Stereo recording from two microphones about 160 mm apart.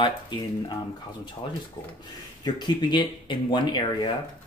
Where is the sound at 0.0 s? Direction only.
30° left (ahead or behind).